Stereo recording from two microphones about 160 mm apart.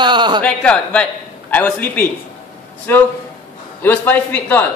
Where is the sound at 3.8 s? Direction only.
10° left (ahead or behind).